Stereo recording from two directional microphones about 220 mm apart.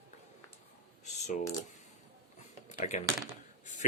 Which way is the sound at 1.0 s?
35° left (ahead or behind).